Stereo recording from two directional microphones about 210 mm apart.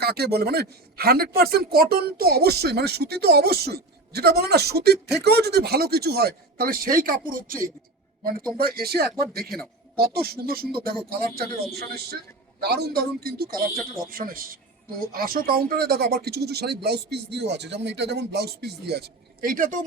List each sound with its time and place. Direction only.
0.0 s a man's voice: 50° right (ahead or behind)